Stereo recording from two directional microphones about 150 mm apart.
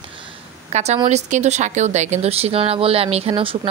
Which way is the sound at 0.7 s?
45° right (ahead or behind).